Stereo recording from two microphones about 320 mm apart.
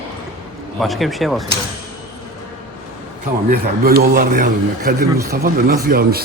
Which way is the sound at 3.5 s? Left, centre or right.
Right.